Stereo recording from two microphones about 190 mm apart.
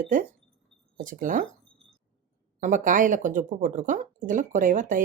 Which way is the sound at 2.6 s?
40° right (ahead or behind).